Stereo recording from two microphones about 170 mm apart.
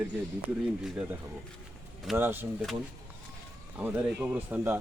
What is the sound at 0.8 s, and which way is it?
Speech, 5° right (ahead or behind).